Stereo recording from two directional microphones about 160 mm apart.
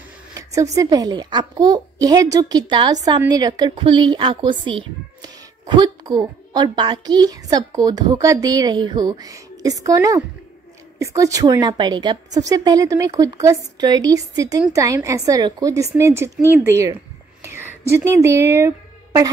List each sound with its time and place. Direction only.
0.3 s a child's voice: 20° right (ahead or behind)